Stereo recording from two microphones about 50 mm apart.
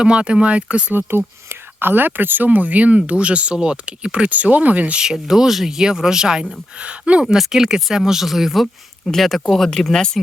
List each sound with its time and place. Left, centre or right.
0.0 s speech: right
0.9 s speech: right
4.9 s speech: centre
7.3 s speech: centre
8.6 s speech: centre